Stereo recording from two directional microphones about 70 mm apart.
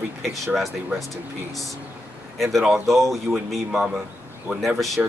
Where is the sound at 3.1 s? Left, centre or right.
Centre.